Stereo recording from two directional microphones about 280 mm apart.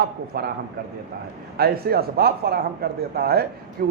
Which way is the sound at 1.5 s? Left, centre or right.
Right.